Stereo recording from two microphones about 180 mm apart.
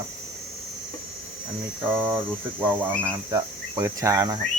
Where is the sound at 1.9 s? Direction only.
10° right (ahead or behind).